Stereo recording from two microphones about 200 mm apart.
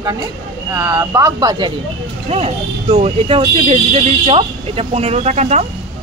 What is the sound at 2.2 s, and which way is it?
Speech, 30° right (ahead or behind).